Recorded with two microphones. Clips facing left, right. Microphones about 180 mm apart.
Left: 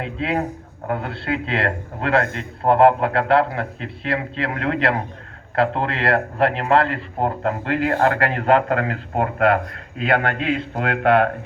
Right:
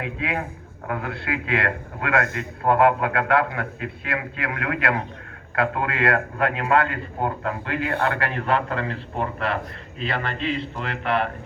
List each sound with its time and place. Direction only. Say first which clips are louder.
0.2 s a man's voice: left 5 dB; 35° left (ahead or behind); by 11.3 s 55° left (ahead or behind)